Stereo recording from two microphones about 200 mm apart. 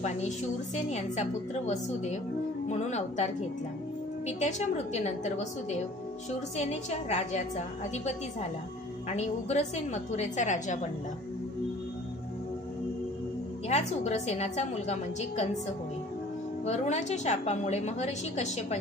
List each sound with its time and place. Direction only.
0.7 s a woman's voice: 35° left (ahead or behind)
4.3 s a woman's voice: 35° left (ahead or behind)
13.7 s a woman's voice: 35° left (ahead or behind)
16.6 s a woman's voice: 35° left (ahead or behind)